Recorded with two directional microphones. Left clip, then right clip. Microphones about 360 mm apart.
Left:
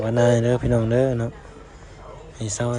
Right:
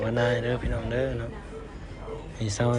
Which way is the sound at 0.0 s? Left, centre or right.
Centre.